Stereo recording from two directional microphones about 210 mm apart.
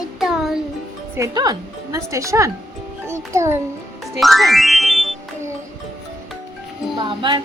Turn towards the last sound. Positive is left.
turn(degrees=-20)  # may be behind; listen again after turning